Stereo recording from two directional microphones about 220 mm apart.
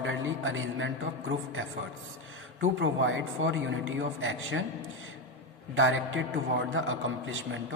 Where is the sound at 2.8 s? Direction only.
60° right (ahead or behind).